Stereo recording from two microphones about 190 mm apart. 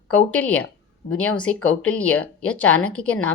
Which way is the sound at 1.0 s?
60° left (ahead or behind).